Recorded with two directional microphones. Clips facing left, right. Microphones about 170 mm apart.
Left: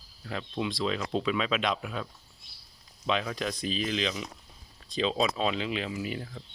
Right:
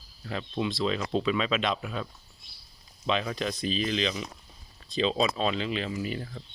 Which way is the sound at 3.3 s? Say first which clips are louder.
Right 2 dB; 10° left (ahead or behind).